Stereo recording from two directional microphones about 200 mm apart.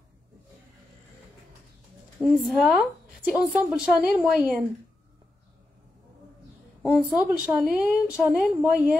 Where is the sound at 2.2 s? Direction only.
5° right (ahead or behind).